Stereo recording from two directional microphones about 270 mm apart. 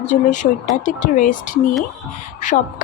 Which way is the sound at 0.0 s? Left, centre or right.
Left.